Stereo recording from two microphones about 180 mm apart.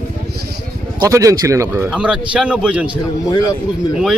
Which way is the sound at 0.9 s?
20° right (ahead or behind).